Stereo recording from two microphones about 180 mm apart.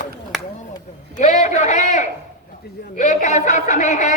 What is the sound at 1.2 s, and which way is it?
A man's voice, 40° left (ahead or behind).